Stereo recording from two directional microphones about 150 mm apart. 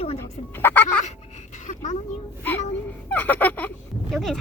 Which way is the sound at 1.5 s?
55° left (ahead or behind).